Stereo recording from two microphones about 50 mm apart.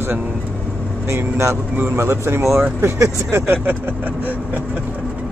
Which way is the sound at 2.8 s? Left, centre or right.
Right.